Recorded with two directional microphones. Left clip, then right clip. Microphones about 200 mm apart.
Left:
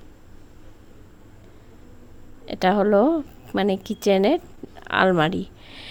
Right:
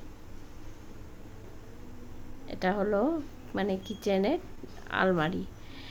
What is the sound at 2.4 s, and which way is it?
A woman's voice, 50° left (ahead or behind).